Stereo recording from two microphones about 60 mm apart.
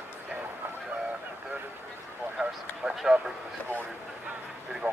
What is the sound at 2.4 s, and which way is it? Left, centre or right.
Speech, centre.